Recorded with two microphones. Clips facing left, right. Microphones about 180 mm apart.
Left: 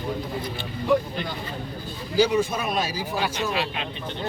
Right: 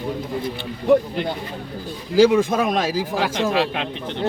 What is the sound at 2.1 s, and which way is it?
Speech, 90° right.